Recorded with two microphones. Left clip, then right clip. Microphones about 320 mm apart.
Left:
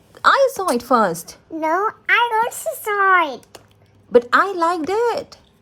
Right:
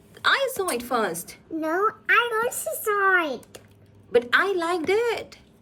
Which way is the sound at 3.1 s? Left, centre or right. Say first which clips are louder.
Left 6 dB; centre.